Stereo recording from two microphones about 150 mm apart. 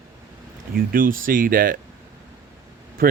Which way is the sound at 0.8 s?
70° right (ahead or behind).